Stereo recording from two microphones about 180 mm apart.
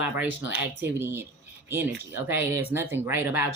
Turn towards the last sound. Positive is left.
turn(degrees=-10)  # may be behind; listen again after turning